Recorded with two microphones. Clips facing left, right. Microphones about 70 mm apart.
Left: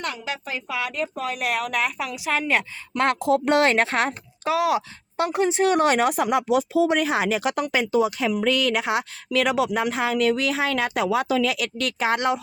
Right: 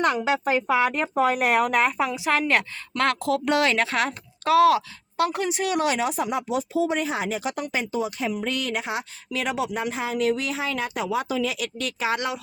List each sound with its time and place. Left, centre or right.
0.0 s a woman's voice: right
2.3 s speech: centre
3.0 s speech: left
4.4 s speech: centre
4.7 s speech: left